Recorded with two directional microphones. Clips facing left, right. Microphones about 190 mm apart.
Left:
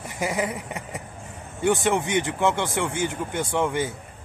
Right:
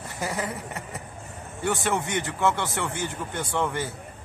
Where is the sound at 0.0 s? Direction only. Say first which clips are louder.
Left 4 dB; 15° left (ahead or behind).